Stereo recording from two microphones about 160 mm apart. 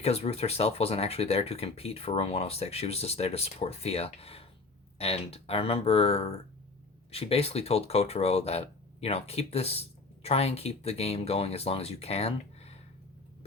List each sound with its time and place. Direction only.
0.0 s speech: 40° left (ahead or behind)